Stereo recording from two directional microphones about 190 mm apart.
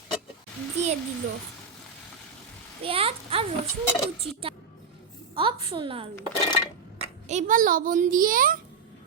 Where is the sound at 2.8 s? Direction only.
30° right (ahead or behind).